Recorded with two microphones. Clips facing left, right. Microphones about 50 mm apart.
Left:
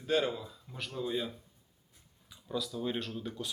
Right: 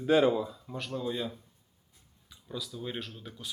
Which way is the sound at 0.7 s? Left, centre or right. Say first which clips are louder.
Right 1 dB; centre.